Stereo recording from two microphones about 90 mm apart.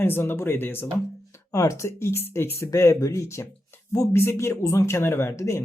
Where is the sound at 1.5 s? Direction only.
35° left (ahead or behind).